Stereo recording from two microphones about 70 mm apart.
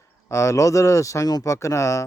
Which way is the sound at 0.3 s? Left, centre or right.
Left.